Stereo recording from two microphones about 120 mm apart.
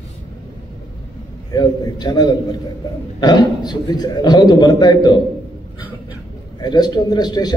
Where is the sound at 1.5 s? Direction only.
35° left (ahead or behind).